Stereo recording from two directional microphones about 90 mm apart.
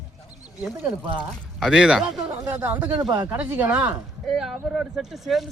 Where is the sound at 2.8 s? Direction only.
50° right (ahead or behind).